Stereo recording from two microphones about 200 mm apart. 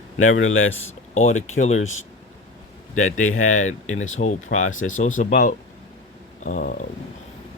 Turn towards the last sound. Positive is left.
turn(degrees=45)  # may be behind; listen again after turning